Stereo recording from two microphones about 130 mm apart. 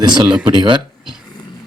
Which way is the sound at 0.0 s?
35° right (ahead or behind).